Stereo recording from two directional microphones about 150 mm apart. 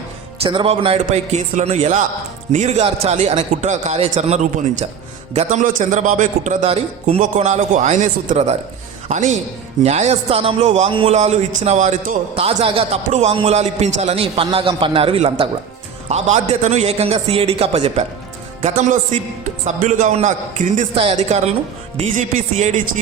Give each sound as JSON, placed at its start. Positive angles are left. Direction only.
{"t": 0.4, "sound": "speech", "side_deg": -35}
{"t": 0.9, "sound": "a man's voice", "side_deg": -50}
{"t": 20.9, "sound": "a man's voice", "side_deg": -40}